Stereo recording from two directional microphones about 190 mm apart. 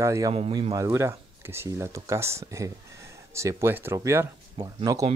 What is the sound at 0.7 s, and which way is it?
Speech, 15° right (ahead or behind).